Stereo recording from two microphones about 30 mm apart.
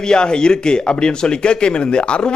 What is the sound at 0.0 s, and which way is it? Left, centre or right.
Speech, left.